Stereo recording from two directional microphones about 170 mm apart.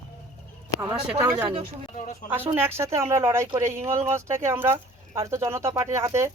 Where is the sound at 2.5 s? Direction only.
15° right (ahead or behind).